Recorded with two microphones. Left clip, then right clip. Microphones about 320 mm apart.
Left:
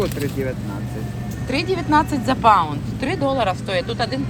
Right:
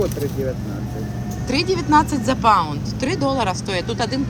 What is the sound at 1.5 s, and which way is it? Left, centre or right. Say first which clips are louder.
Speech: right 2 dB; centre.